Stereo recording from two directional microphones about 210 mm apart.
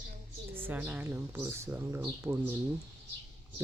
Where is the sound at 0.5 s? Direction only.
10° right (ahead or behind).